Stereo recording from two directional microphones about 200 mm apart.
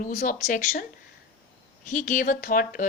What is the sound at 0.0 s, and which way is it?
Speech, 40° left (ahead or behind).